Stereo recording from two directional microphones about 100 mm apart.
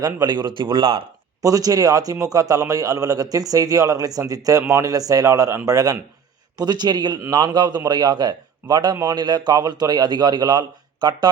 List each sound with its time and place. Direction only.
0.0 s a man's voice: 40° right (ahead or behind); by 1.0 s 60° right (ahead or behind)
1.4 s a man's voice: 35° right (ahead or behind)